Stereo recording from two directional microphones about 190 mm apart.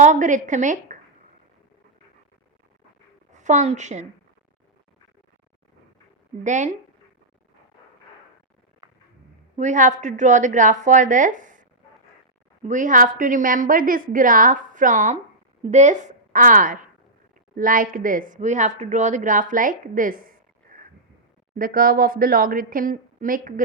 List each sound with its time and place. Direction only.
0.0 s a woman's voice: 40° right (ahead or behind)
3.3 s a woman's voice: 40° right (ahead or behind)
6.4 s a woman's voice: 40° right (ahead or behind)
9.6 s a woman's voice: 40° right (ahead or behind)
12.6 s a woman's voice: 40° right (ahead or behind)
20.7 s a sound: 50° right (ahead or behind)
21.5 s a woman's voice: 50° right (ahead or behind)